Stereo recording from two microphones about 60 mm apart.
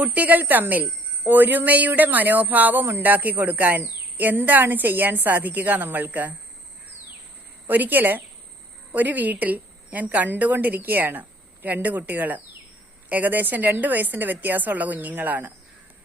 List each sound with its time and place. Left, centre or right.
0.0 s a woman's voice: right
7.7 s a woman's voice: right